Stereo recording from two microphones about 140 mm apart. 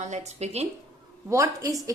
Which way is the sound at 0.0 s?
55° right (ahead or behind).